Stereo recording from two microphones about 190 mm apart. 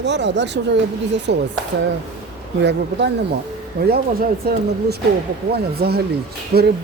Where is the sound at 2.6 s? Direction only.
65° right (ahead or behind).